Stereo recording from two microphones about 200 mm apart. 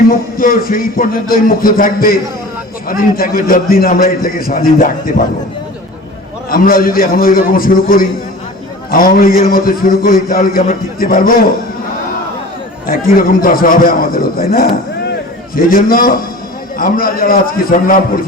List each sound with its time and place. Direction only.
0.1 s a man's voice: 45° left (ahead or behind)
6.5 s a man's voice: 45° left (ahead or behind)
12.9 s a man's voice: 45° left (ahead or behind)